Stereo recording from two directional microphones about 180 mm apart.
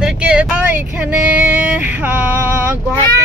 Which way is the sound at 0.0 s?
5° right (ahead or behind).